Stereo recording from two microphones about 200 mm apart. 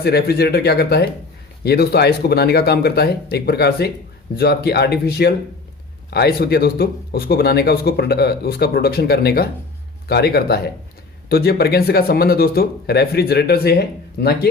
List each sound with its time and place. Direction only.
0.0 s speech: 50° left (ahead or behind)